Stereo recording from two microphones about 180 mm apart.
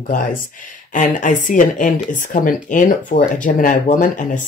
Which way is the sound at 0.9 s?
45° left (ahead or behind).